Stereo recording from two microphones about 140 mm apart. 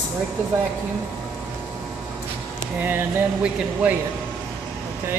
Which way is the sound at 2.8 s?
15° right (ahead or behind).